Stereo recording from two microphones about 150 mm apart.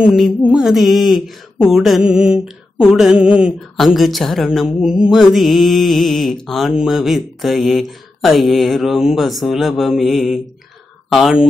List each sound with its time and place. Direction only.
0.0 s mantra: centre (ahead or behind)